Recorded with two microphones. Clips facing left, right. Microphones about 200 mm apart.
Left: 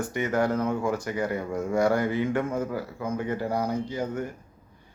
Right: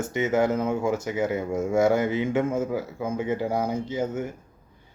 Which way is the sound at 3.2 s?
10° right (ahead or behind).